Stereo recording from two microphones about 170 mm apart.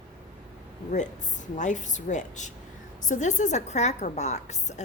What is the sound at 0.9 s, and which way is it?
A woman's voice, 45° left (ahead or behind).